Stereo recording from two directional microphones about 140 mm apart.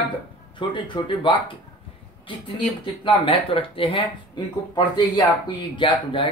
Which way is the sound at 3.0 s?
40° left (ahead or behind).